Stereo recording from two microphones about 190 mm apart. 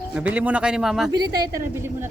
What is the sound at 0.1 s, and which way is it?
A man's voice, 5° right (ahead or behind).